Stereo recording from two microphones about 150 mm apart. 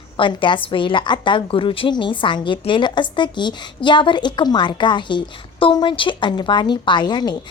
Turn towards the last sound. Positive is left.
turn(degrees=30)  # may be behind; listen again after turning